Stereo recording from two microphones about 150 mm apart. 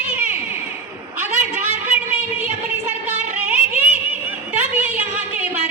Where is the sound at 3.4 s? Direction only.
10° right (ahead or behind).